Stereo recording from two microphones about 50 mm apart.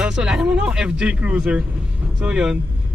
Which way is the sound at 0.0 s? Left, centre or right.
Centre.